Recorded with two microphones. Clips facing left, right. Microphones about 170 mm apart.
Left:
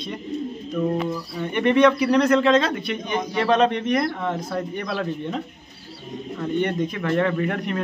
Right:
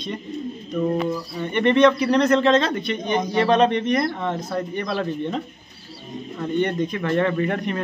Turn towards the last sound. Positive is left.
turn(degrees=0)  # may be behind; listen again after turning